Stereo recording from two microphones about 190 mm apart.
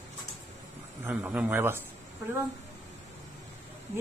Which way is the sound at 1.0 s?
10° right (ahead or behind).